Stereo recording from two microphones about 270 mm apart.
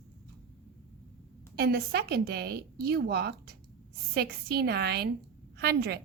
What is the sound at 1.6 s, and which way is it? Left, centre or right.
A woman's voice, right.